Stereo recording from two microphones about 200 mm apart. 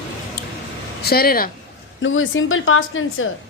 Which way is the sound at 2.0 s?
80° left.